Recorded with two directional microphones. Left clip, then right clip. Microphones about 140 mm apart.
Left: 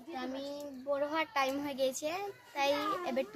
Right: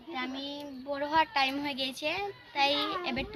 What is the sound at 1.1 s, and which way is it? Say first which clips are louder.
A child's voice: right 6 dB; 25° left (ahead or behind).